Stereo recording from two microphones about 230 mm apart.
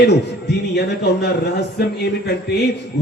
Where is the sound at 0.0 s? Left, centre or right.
Left.